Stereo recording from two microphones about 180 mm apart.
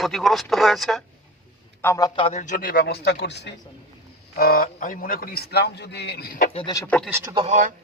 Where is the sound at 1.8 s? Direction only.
15° left (ahead or behind).